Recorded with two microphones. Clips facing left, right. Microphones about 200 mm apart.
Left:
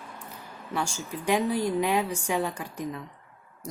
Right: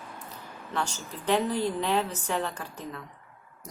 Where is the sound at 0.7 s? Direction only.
10° left (ahead or behind).